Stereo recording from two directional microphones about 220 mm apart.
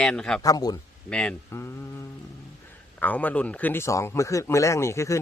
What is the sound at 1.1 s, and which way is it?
Speech, 5° left (ahead or behind).